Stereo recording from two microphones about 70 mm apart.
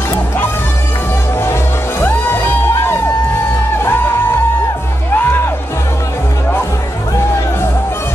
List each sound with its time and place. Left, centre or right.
1.4 s music: left
5.1 s music: left